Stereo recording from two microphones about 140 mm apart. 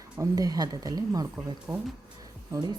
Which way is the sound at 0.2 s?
25° right (ahead or behind).